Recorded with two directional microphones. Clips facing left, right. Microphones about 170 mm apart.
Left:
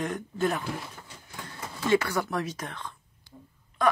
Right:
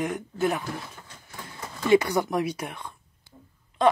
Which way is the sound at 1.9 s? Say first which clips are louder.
Right 4 dB; 15° right (ahead or behind).